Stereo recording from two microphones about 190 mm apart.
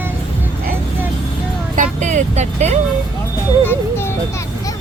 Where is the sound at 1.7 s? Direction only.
40° right (ahead or behind).